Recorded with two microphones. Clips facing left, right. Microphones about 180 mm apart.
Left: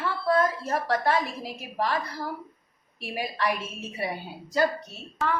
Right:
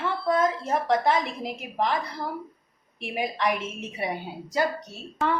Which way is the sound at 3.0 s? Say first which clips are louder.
Right 2 dB; 20° right (ahead or behind).